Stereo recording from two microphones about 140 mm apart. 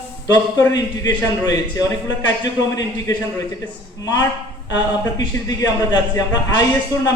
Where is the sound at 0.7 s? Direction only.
30° left (ahead or behind).